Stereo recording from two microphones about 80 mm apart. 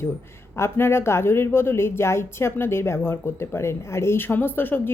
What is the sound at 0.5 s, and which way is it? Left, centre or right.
Speech, left.